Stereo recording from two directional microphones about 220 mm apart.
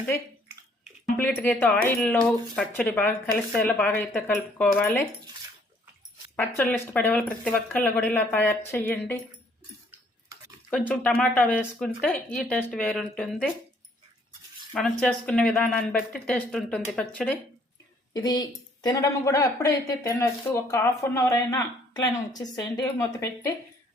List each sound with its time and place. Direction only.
1.1 s speech: 10° left (ahead or behind)
6.6 s speech: 5° left (ahead or behind)
10.7 s speech: 5° left (ahead or behind)
14.7 s speech: 5° left (ahead or behind)
18.1 s speech: 20° left (ahead or behind)